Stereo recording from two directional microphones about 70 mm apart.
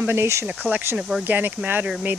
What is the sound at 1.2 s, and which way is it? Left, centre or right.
Speech, right.